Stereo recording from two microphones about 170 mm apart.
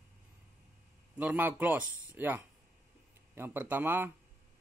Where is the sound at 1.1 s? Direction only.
10° right (ahead or behind).